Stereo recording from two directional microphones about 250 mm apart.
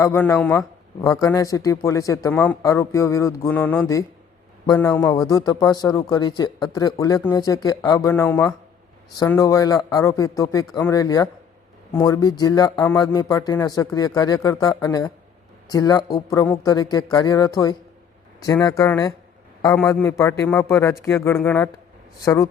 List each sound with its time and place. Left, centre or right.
0.0 s a man's voice: centre